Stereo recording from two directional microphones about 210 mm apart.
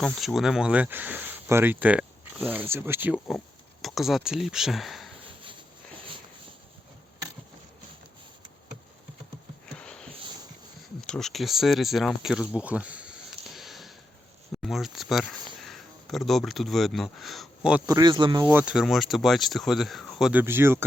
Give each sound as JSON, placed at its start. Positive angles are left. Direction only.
{"t": 0.0, "sound": "speech", "side_deg": 0}
{"t": 9.7, "sound": "a sound", "side_deg": 5}
{"t": 11.0, "sound": "speech", "side_deg": 5}
{"t": 13.6, "sound": "a sound", "side_deg": 0}
{"t": 14.6, "sound": "speech", "side_deg": 0}
{"t": 17.8, "sound": "speech", "side_deg": -20}
{"t": 18.4, "sound": "speech", "side_deg": -5}
{"t": 20.4, "sound": "speech", "side_deg": -10}